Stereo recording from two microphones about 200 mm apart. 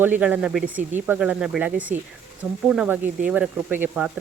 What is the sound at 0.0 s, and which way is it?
Speech, 5° right (ahead or behind).